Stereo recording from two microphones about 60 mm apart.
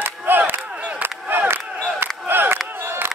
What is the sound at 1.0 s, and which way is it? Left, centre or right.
Battle cry, right.